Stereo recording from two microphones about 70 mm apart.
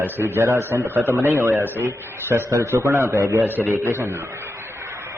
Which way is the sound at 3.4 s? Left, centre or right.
Right.